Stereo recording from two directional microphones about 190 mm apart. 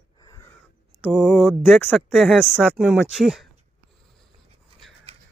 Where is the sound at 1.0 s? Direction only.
Centre (ahead or behind).